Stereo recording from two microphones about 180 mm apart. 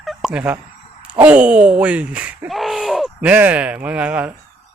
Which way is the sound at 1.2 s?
5° right (ahead or behind).